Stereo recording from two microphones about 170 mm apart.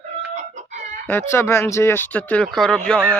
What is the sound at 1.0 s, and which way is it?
Speech, 15° left (ahead or behind).